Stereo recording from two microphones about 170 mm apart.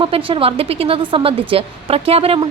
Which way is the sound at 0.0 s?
30° right (ahead or behind).